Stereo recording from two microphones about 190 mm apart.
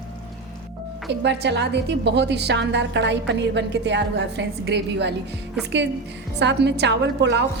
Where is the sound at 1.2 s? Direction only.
60° right (ahead or behind).